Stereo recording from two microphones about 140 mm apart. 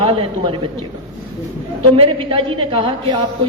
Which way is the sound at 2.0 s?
40° right (ahead or behind).